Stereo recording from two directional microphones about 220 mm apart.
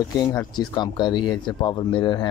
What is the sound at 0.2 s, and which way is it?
Speech, 15° left (ahead or behind).